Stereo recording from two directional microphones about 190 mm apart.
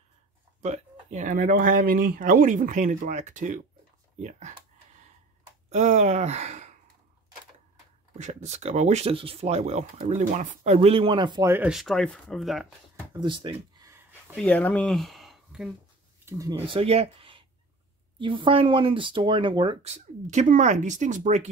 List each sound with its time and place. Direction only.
0.7 s speech: 40° right (ahead or behind)
5.7 s speech: 40° right (ahead or behind)
8.2 s speech: 40° right (ahead or behind); by 12.7 s centre (ahead or behind)
13.1 s speech: 25° right (ahead or behind)
14.3 s speech: 5° left (ahead or behind)
16.3 s speech: 15° right (ahead or behind); by 21.5 s 40° right (ahead or behind)